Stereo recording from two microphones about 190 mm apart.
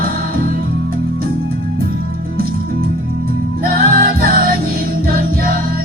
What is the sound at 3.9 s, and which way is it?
Music, 50° right (ahead or behind).